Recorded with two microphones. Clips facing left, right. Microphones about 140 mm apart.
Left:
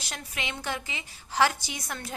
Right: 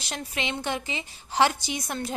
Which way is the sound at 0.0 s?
25° right (ahead or behind).